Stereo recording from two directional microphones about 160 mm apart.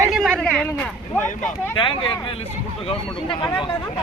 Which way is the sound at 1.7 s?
30° left (ahead or behind).